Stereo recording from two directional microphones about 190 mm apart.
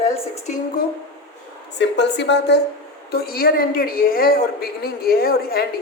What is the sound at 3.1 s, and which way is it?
A woman's voice, 50° left (ahead or behind).